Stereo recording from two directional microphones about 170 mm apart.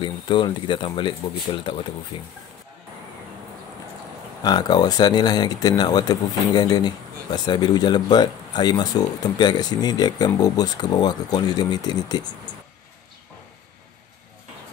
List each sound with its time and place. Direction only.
0.0 s speech: 30° left (ahead or behind)
4.4 s speech: 25° left (ahead or behind)